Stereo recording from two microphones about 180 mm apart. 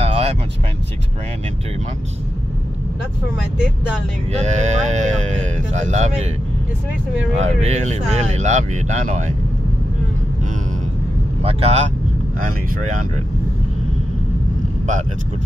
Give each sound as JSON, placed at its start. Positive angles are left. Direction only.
{"t": 0.0, "sound": "vehicle", "side_deg": -35}
{"t": 4.3, "sound": "speech", "side_deg": -40}
{"t": 7.3, "sound": "speech", "side_deg": -40}
{"t": 11.4, "sound": "speech", "side_deg": -35}
{"t": 12.4, "sound": "speech", "side_deg": -50}